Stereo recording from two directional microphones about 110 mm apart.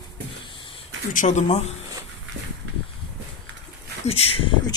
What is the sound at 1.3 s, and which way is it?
Speech, 90° left.